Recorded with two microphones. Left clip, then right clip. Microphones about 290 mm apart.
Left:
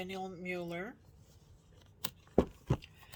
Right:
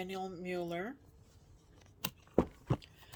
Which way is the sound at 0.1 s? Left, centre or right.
Right.